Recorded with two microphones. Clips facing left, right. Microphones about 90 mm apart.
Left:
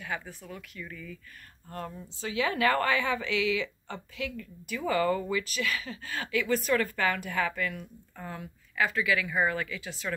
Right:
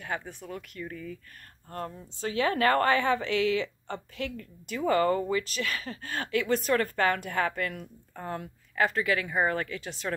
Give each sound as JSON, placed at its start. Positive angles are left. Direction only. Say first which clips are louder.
{"t": 0.3, "sound": "speech", "louder": "right 3 dB", "side_deg": -55}
{"t": 2.2, "sound": "a woman's voice", "louder": "right 2 dB", "side_deg": -40}